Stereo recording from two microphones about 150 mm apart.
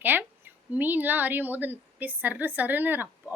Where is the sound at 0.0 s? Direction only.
10° right (ahead or behind).